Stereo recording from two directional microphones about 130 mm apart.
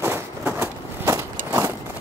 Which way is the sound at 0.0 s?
20° right (ahead or behind).